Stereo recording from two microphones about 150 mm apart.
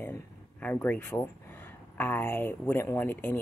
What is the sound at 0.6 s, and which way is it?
Speech, 10° left (ahead or behind).